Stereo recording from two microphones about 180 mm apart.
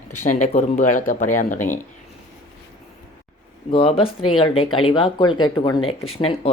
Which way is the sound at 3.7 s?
30° left (ahead or behind).